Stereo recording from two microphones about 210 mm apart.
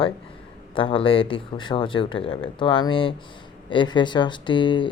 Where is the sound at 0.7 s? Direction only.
25° left (ahead or behind).